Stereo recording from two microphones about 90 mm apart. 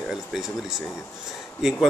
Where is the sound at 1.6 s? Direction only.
5° right (ahead or behind).